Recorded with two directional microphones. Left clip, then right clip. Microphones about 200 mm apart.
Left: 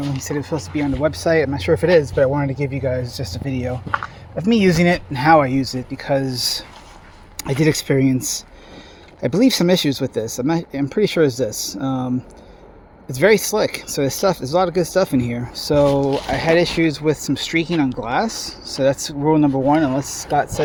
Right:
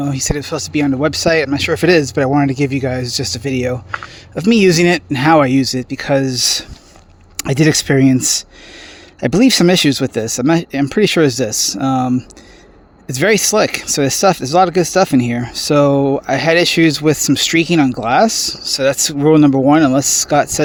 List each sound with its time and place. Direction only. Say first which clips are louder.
0.2 s speech: right 4 dB; 45° right (ahead or behind)